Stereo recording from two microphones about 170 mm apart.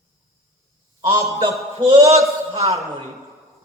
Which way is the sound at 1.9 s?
40° right (ahead or behind).